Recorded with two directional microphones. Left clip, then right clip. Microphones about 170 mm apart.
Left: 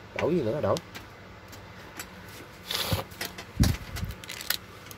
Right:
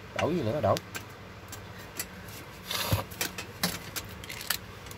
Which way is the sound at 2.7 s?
50° left (ahead or behind).